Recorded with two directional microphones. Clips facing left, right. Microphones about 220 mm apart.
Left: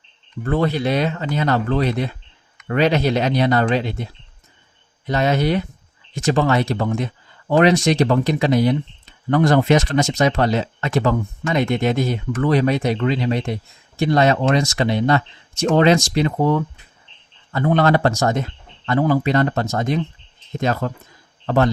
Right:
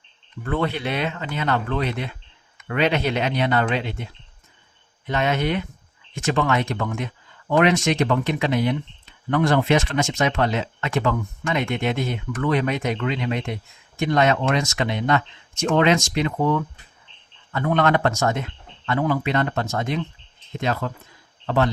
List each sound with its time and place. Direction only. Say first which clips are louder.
0.4 s a man's voice: left 5 dB; 40° left (ahead or behind)